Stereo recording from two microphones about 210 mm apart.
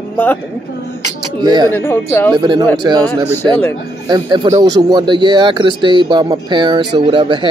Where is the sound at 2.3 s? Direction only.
20° right (ahead or behind).